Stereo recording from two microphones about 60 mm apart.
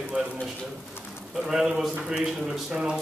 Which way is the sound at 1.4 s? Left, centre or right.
Centre.